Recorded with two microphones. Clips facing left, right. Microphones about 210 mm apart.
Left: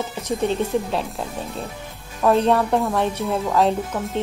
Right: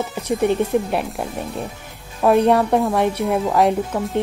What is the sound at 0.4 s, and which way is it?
Speech, 15° right (ahead or behind).